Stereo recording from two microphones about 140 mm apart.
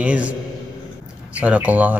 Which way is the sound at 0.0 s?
10° right (ahead or behind).